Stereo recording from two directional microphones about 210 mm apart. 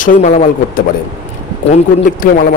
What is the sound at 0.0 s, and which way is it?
Speech, 35° left (ahead or behind).